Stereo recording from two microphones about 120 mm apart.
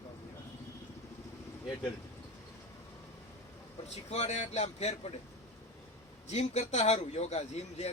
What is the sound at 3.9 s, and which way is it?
A man's voice, 65° left (ahead or behind).